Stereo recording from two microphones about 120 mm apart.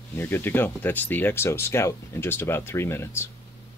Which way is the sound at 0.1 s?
20° left (ahead or behind).